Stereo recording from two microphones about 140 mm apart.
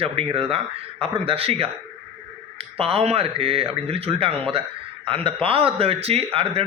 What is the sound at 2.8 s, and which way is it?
A man's voice, 45° right (ahead or behind).